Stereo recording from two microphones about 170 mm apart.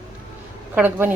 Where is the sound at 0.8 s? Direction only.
10° right (ahead or behind).